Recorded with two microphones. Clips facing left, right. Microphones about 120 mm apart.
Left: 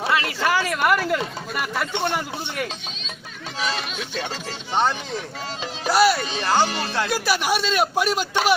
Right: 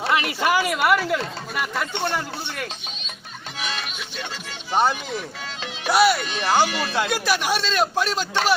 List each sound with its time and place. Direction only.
0.1 s a sound: 20° right (ahead or behind); by 1.2 s centre (ahead or behind)
1.2 s speech: 5° left (ahead or behind)
4.7 s speech: 10° right (ahead or behind)
6.7 s speech: 35° left (ahead or behind)
7.1 s a man's voice: 5° left (ahead or behind)